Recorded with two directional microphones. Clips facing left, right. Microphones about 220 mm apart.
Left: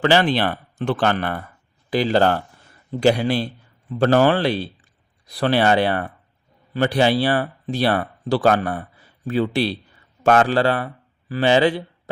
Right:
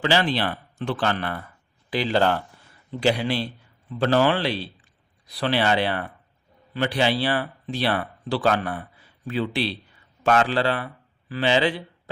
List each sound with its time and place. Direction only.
0.0 s speech: 55° left (ahead or behind)